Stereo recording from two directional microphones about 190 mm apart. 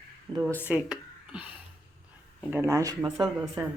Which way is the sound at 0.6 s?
5° right (ahead or behind).